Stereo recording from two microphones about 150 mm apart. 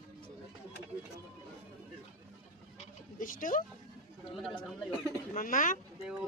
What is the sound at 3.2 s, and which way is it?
Speech, 65° left (ahead or behind).